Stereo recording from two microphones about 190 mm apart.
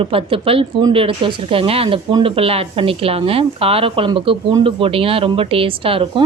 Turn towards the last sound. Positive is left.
turn(degrees=-30)  # may be behind; listen again after turning